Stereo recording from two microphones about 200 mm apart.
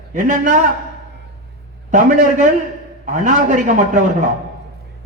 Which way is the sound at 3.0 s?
35° right (ahead or behind).